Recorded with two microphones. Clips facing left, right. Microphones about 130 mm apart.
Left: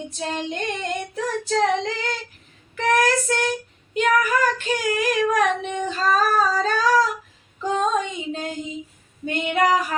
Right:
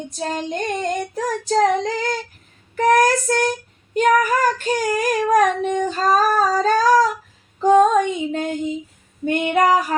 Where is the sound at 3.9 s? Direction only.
40° right (ahead or behind).